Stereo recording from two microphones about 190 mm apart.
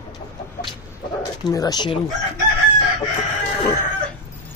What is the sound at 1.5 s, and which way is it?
Speech, 20° left (ahead or behind).